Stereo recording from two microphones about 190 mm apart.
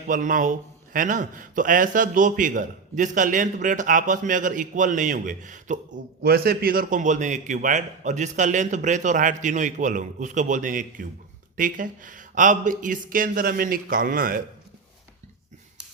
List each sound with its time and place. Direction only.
0.1 s a man's voice: 45° right (ahead or behind)